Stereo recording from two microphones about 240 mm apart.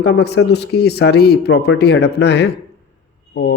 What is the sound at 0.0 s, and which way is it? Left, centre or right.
Speech, left.